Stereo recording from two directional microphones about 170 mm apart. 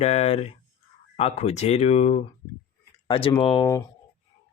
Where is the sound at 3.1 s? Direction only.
30° left (ahead or behind).